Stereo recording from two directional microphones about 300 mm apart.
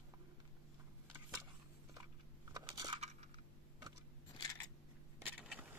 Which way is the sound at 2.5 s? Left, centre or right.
Centre.